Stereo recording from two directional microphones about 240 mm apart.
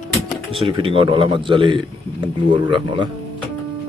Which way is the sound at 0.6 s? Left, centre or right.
Right.